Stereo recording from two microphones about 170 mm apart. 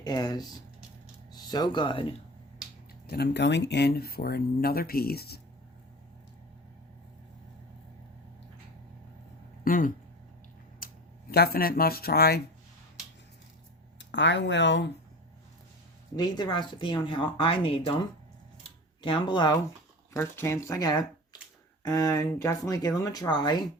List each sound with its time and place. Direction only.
0.0 s speech: 25° left (ahead or behind)
3.1 s speech: 80° left
9.6 s speech: 50° left (ahead or behind)
14.0 s speech: 90° left
16.1 s speech: 25° left (ahead or behind)
19.0 s speech: 30° left (ahead or behind)
20.1 s speech: 15° left (ahead or behind)